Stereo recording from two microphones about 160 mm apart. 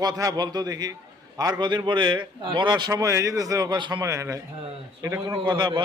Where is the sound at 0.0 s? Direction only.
25° right (ahead or behind).